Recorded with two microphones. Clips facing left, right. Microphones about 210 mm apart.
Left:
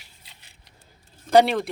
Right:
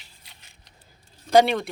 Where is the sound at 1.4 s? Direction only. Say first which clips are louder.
Left 1 dB; centre (ahead or behind).